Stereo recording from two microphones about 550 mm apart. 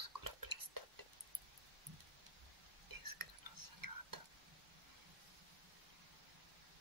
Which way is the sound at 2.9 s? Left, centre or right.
Right.